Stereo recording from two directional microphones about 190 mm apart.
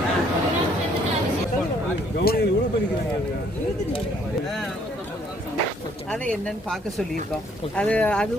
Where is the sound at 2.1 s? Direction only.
55° left (ahead or behind).